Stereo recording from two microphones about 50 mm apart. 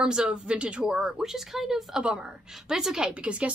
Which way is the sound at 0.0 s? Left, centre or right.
Centre.